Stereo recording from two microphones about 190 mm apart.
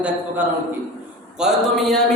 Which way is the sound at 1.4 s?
Centre (ahead or behind).